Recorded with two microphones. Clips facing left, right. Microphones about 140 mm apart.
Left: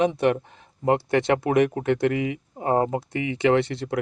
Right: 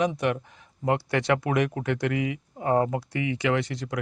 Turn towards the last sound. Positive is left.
turn(degrees=30)  # may be behind; listen again after turning